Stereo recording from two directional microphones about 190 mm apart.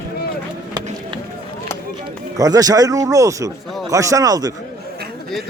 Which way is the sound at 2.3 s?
20° right (ahead or behind).